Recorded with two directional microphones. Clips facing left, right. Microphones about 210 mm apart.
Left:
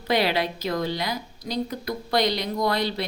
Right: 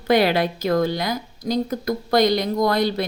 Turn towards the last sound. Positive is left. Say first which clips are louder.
# right 5 dB
turn(degrees=-45)  # may be behind; listen again after turning